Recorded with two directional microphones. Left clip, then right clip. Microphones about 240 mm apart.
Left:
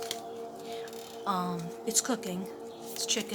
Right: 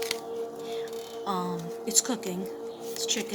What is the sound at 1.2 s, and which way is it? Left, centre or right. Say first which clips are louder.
Speech: even; centre.